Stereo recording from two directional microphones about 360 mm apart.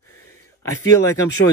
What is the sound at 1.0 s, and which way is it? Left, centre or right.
Speech, centre.